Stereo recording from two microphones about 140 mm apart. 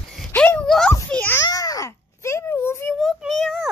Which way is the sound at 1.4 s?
25° left (ahead or behind).